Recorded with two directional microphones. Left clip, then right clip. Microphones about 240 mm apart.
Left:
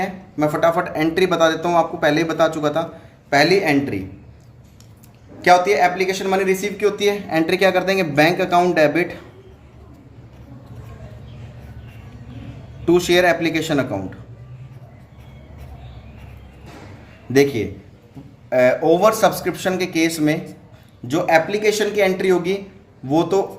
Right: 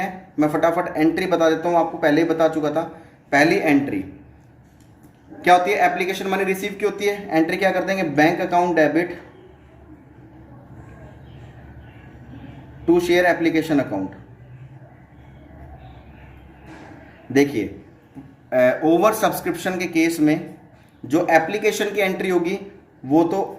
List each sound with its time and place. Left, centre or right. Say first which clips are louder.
0.0 s speech: left 1 dB; left
5.4 s speech: left 2 dB; left
12.8 s speech: left 2 dB; left
17.3 s speech: left 3 dB; left
18.4 s speech: left 2 dB; left